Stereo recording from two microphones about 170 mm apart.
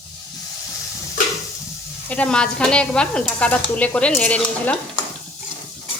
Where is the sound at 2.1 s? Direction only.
5° left (ahead or behind).